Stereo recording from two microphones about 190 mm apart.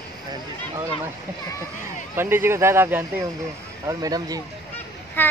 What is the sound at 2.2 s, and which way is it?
Speech, 10° right (ahead or behind).